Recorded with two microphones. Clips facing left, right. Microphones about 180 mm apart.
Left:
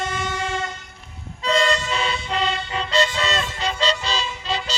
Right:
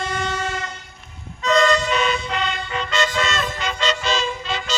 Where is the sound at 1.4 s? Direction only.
30° left (ahead or behind).